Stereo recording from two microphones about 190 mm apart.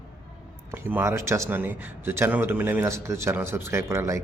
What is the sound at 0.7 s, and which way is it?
A man's voice, 10° right (ahead or behind).